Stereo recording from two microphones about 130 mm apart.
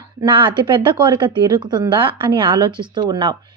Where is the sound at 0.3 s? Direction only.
40° right (ahead or behind).